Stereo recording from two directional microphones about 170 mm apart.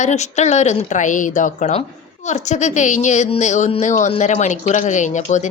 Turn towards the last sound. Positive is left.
turn(degrees=45)  # may be behind; listen again after turning